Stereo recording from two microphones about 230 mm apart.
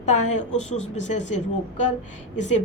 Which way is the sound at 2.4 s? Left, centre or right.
Left.